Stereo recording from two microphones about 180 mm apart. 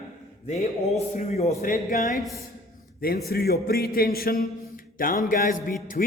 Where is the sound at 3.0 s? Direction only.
60° left (ahead or behind).